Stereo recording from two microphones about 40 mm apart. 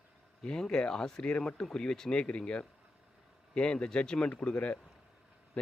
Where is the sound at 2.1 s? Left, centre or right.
Left.